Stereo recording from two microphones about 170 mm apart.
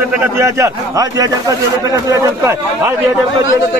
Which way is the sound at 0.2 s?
15° right (ahead or behind).